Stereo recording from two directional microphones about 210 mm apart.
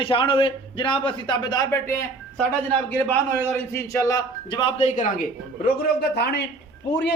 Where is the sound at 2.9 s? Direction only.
10° left (ahead or behind).